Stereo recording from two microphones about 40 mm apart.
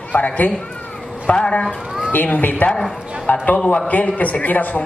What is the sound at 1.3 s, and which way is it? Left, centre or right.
Speech, left.